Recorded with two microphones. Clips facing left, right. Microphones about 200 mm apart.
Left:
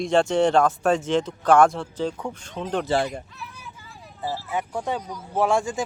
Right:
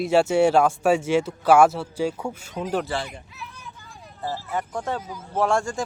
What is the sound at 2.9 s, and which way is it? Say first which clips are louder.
Speech: left 6 dB; 45° left (ahead or behind).